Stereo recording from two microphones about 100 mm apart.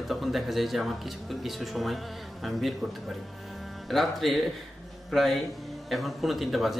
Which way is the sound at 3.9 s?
Centre (ahead or behind).